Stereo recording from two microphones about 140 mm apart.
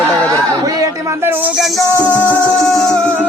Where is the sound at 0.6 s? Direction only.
25° right (ahead or behind).